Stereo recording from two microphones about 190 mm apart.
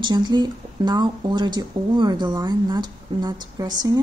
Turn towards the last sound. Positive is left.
turn(degrees=-20)  # may be behind; listen again after turning